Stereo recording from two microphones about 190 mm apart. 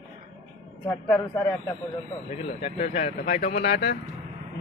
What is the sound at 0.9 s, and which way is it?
Speech, 10° left (ahead or behind).